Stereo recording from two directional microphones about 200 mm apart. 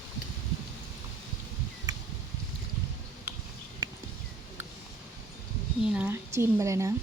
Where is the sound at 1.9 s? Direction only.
15° right (ahead or behind).